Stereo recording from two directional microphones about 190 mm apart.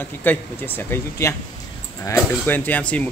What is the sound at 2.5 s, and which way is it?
Speech, 10° left (ahead or behind).